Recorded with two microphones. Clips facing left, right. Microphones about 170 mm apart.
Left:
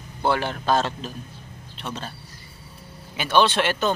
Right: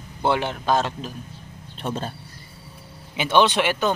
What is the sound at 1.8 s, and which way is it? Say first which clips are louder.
Speech: right 5 dB; 45° right (ahead or behind).